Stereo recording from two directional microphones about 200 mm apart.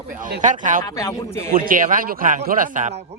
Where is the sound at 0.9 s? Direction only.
15° left (ahead or behind).